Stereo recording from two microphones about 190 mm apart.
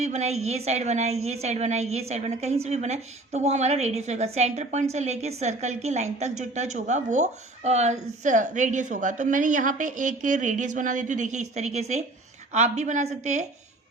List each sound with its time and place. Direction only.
0.0 s a woman's voice: 35° right (ahead or behind)